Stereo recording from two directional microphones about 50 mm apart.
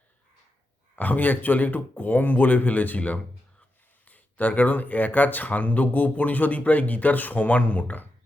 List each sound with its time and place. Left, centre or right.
0.9 s speech: left